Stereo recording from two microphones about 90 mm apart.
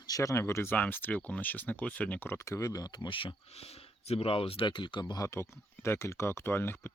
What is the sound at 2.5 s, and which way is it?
Speech, 40° left (ahead or behind).